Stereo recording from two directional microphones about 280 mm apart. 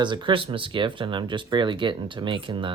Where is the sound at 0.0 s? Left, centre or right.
Centre.